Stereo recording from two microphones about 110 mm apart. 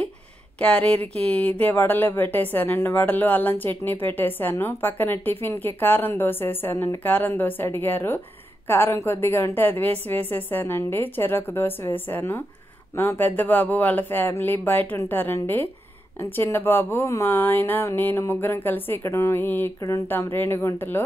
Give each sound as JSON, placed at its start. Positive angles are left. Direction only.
{"t": 0.6, "sound": "speech", "side_deg": 10}